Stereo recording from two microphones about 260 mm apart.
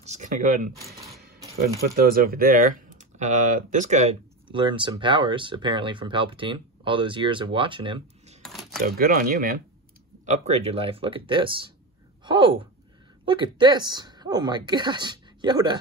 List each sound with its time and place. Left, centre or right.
0.0 s speech: right
2.0 s speech: right; by 8.4 s centre
8.4 s a sound: centre
8.8 s speech: right; by 15.8 s centre